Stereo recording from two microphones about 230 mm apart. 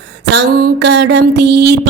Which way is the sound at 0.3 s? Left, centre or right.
Right.